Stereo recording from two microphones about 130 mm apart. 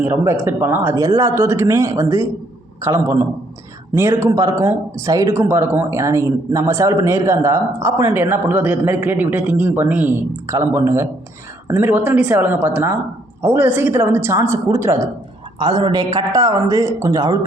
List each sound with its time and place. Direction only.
0.0 s a woman's voice: 20° right (ahead or behind)
0.9 s a woman's voice: 25° right (ahead or behind)
15.5 s speech: 35° right (ahead or behind)